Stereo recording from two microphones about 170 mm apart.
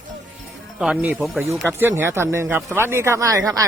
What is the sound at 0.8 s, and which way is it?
Speech, 5° right (ahead or behind).